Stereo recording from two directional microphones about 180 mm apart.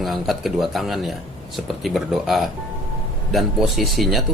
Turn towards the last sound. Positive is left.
turn(degrees=0)  # may be behind; listen again after turning